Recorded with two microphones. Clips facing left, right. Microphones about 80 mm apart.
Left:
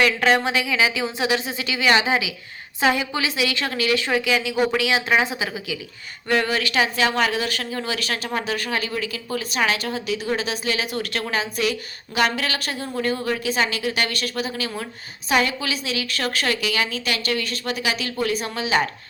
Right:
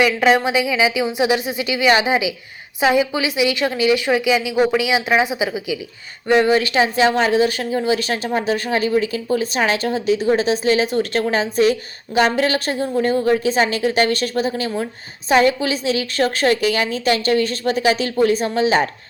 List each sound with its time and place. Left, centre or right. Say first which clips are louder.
0.0 s a woman's voice: right 4 dB; centre; by 18.9 s right